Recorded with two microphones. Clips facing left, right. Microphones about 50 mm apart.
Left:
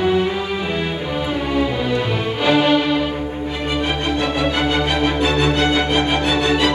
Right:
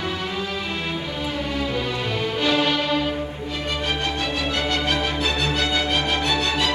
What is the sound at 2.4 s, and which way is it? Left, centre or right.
Music, centre.